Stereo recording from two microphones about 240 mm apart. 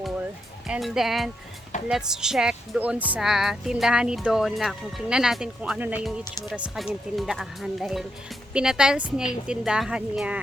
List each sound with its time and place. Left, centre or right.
0.7 s speech: centre